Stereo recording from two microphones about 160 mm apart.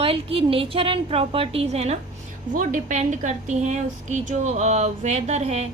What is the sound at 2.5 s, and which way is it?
A woman's voice, 55° right (ahead or behind).